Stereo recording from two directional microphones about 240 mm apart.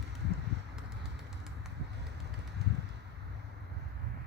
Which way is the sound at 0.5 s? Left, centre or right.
Right.